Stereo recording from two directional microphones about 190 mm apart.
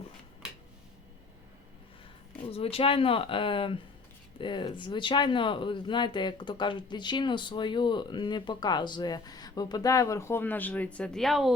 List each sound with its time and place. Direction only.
2.5 s speech: 30° left (ahead or behind); by 11.5 s centre (ahead or behind)